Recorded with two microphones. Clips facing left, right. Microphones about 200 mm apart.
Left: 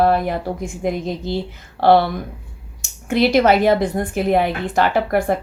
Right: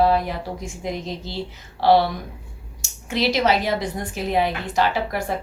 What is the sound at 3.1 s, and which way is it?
Speech, 55° left (ahead or behind).